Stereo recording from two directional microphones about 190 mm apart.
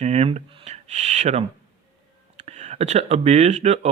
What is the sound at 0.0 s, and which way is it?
Speech, 35° right (ahead or behind).